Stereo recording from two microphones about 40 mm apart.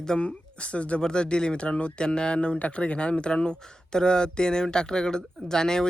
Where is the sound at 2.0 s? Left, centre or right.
Left.